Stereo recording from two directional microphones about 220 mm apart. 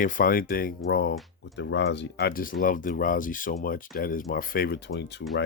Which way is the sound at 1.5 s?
55° left (ahead or behind).